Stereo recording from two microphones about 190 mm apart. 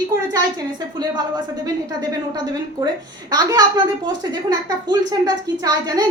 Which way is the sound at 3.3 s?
20° right (ahead or behind).